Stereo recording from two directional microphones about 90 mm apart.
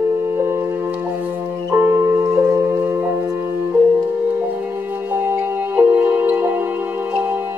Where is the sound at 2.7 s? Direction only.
20° right (ahead or behind).